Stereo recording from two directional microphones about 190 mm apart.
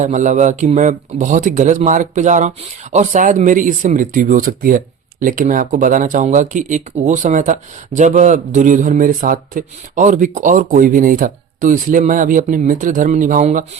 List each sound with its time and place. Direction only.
0.0 s speech: 40° right (ahead or behind)